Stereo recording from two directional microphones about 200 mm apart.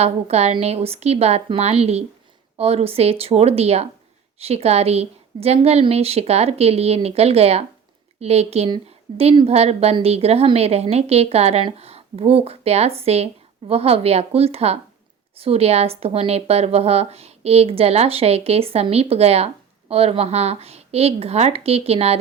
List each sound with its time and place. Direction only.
0.0 s a woman's voice: 30° right (ahead or behind)